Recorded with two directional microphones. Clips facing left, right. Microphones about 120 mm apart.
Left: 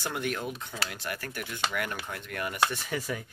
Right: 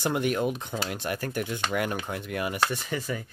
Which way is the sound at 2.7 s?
Centre (ahead or behind).